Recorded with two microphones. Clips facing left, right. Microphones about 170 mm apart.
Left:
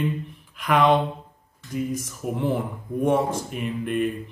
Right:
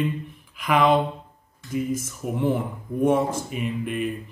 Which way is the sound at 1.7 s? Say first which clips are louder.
Right 1 dB; centre (ahead or behind).